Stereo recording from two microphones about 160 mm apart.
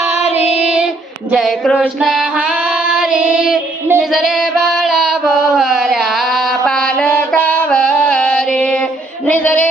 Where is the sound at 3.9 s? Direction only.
Centre (ahead or behind).